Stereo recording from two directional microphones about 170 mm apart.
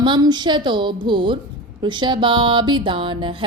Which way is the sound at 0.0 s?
25° right (ahead or behind).